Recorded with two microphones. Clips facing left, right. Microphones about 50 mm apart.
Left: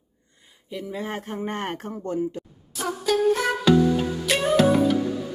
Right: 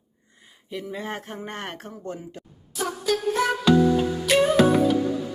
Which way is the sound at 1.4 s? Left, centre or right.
Left.